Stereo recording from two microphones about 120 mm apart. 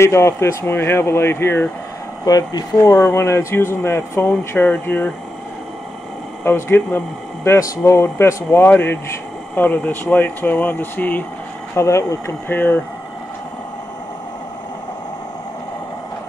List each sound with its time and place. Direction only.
0.0 s speech: 25° left (ahead or behind)
2.2 s speech: 30° left (ahead or behind); by 5.1 s 15° left (ahead or behind)
6.4 s speech: 15° left (ahead or behind)